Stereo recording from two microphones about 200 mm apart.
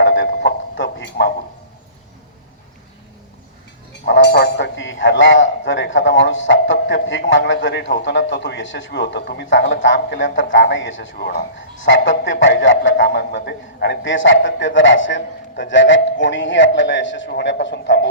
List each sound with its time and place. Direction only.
0.0 s a sound: 65° left (ahead or behind)
4.0 s speech: 60° left (ahead or behind)
11.2 s speech: 45° left (ahead or behind)
11.8 s speech: 70° left (ahead or behind)